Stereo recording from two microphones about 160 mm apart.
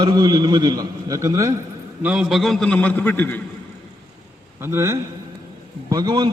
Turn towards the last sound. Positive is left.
turn(degrees=-25)  # may be behind; listen again after turning